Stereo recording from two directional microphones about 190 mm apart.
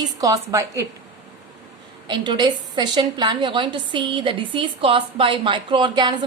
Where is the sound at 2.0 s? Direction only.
25° right (ahead or behind).